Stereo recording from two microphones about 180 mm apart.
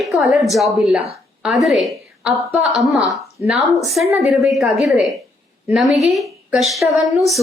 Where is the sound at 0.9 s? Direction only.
35° right (ahead or behind).